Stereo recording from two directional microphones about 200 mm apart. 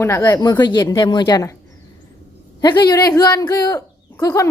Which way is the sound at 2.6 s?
20° left (ahead or behind).